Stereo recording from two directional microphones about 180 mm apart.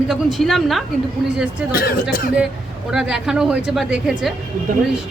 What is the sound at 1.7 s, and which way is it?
Speech, 55° left (ahead or behind).